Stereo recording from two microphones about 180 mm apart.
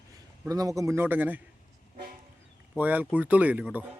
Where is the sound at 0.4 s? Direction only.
20° right (ahead or behind).